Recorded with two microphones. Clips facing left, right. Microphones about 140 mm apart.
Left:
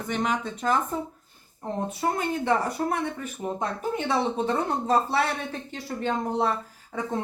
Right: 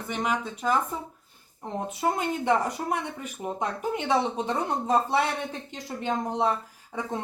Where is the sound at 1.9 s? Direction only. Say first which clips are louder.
Right 1 dB; 15° right (ahead or behind).